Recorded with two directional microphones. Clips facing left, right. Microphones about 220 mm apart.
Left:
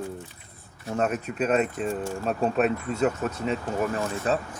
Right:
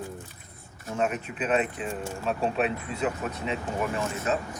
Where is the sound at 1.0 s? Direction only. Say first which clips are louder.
Left 2 dB; 40° left (ahead or behind).